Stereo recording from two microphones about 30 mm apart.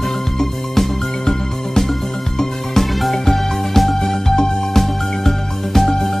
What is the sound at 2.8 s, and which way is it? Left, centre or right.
Music, centre.